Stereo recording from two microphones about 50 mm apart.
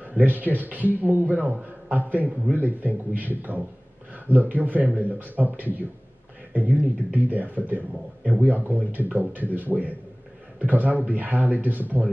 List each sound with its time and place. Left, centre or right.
0.1 s speech: right
2.6 s a man's voice: left
3.2 s speech: right
7.1 s speech: right